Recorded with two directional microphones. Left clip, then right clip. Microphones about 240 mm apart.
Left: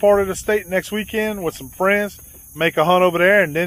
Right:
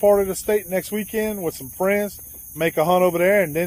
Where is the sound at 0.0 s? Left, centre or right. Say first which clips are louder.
Left 2 dB; centre.